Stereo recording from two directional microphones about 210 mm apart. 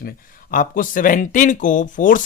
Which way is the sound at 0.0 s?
45° left (ahead or behind).